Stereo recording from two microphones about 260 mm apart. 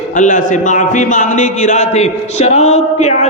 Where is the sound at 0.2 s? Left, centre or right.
Left.